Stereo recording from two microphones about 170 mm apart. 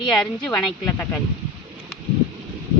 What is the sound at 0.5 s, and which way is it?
Speech, 15° left (ahead or behind).